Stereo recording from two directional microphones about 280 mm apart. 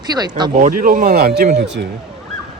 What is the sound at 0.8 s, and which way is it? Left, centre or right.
Speech, right.